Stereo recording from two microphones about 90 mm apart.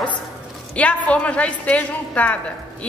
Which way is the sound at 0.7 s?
15° left (ahead or behind).